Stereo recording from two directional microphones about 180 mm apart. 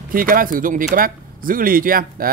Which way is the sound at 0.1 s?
50° right (ahead or behind).